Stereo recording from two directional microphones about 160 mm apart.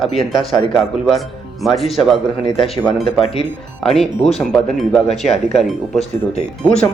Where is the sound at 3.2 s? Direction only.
35° left (ahead or behind).